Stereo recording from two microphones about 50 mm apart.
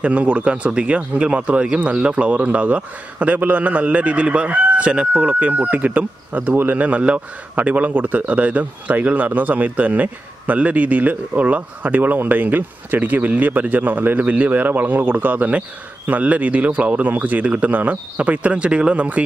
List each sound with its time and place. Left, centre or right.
0.0 s speech: right